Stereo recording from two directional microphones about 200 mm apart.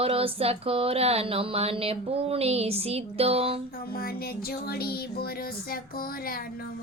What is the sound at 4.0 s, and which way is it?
Music, 50° left (ahead or behind).